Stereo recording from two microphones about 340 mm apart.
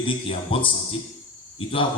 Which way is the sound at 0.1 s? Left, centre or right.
Centre.